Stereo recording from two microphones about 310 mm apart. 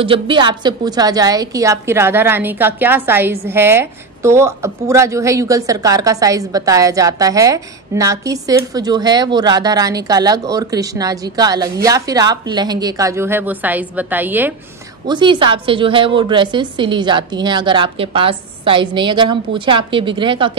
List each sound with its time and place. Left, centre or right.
0.0 s a woman's voice: centre